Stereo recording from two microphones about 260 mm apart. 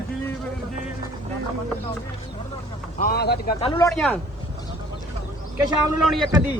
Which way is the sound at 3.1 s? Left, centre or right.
Left.